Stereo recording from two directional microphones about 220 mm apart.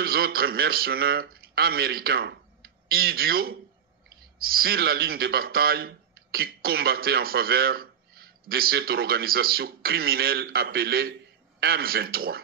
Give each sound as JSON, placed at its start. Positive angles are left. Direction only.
{"t": 0.0, "sound": "a man's voice", "side_deg": -45}